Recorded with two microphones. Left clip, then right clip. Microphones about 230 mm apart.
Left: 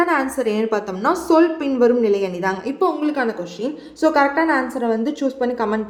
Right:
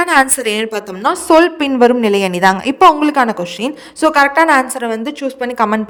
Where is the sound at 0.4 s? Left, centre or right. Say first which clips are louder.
Right 3 dB; right.